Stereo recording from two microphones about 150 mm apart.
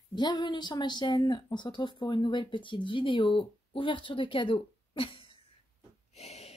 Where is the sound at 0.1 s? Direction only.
30° left (ahead or behind).